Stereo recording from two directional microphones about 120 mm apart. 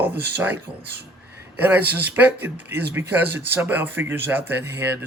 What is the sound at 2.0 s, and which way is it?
Speech, 15° right (ahead or behind).